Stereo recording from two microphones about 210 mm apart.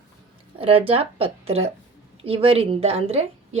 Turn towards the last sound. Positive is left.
turn(degrees=-30)  # may be behind; listen again after turning